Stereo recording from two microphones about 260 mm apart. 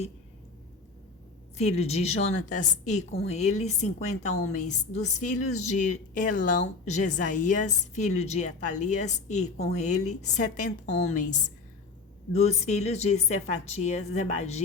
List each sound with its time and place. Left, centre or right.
1.5 s a woman's voice: left